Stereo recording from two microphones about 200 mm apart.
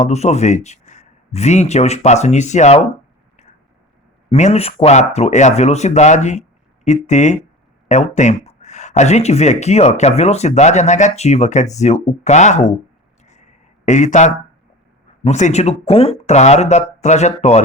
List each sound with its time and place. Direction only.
0.0 s speech: 35° left (ahead or behind)
4.3 s speech: 35° left (ahead or behind)
13.8 s speech: 35° left (ahead or behind)